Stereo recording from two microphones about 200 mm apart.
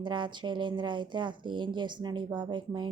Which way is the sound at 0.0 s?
25° right (ahead or behind).